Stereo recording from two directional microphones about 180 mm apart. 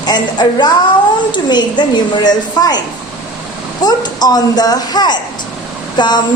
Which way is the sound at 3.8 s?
20° left (ahead or behind).